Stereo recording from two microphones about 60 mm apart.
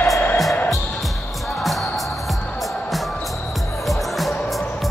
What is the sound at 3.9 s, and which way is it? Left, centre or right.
Music, centre.